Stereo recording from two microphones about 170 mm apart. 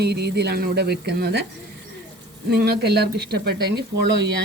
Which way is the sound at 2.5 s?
70° right (ahead or behind).